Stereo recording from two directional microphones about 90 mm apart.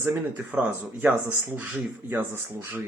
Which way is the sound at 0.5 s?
15° right (ahead or behind).